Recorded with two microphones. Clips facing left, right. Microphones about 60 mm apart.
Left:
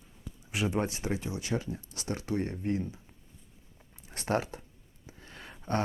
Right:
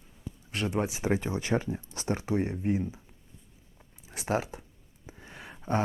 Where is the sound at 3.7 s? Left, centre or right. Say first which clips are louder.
Right 2 dB; centre.